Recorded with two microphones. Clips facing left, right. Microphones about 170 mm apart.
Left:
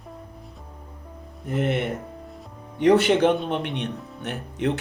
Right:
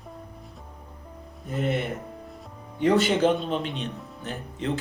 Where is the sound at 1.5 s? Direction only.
65° left (ahead or behind).